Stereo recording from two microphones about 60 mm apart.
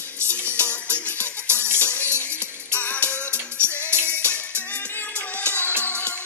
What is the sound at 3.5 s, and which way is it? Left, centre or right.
Music, right.